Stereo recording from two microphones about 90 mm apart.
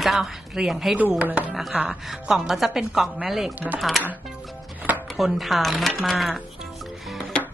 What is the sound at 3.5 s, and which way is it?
Chopping, 15° right (ahead or behind).